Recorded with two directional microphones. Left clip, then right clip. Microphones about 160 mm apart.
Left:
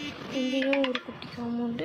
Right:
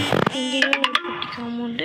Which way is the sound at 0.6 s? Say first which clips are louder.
Right 8 dB; 55° right (ahead or behind).